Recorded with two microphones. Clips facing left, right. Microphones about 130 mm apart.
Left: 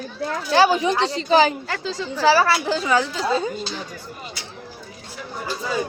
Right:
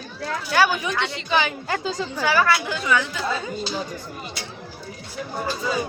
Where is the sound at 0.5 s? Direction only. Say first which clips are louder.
Left 4 dB; 30° left (ahead or behind).